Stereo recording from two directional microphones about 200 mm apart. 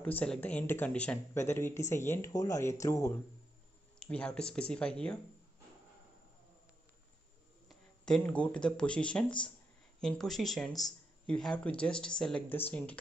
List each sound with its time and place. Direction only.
0.0 s speech: 5° left (ahead or behind)
4.0 s speech: 5° left (ahead or behind)
7.6 s speech: 5° left (ahead or behind)